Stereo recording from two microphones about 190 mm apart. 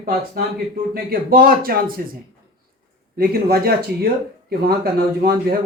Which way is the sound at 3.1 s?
55° right (ahead or behind).